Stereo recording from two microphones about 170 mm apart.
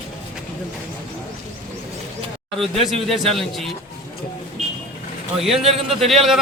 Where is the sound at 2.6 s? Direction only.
Centre (ahead or behind).